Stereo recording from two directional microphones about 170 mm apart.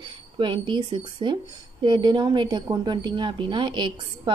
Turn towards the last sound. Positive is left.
turn(degrees=-25)  # may be behind; listen again after turning